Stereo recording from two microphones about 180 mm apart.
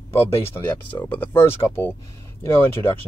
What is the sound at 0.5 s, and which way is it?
Speech, 10° left (ahead or behind).